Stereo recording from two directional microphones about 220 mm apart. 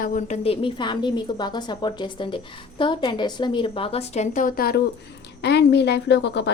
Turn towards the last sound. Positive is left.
turn(degrees=50)  # may be behind; listen again after turning